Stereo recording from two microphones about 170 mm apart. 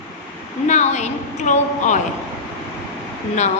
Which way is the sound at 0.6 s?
40° left (ahead or behind).